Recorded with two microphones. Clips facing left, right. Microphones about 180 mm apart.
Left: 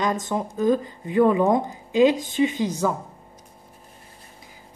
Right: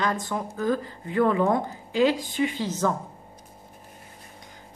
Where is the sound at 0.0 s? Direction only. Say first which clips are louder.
Left 3 dB; 20° left (ahead or behind).